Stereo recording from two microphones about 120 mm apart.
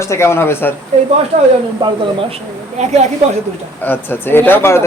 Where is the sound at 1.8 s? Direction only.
40° right (ahead or behind).